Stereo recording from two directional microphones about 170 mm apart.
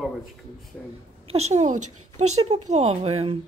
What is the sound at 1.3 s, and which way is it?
Speech, 40° right (ahead or behind).